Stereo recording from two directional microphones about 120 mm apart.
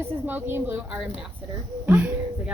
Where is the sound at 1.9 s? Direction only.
20° right (ahead or behind).